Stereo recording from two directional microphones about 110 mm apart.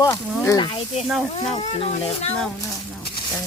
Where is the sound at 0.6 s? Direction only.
45° left (ahead or behind).